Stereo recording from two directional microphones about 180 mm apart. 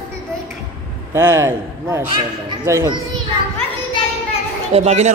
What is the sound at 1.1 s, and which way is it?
A man's voice, 15° right (ahead or behind).